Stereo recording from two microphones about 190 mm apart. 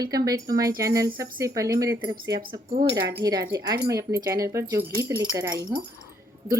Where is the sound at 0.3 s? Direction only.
20° right (ahead or behind).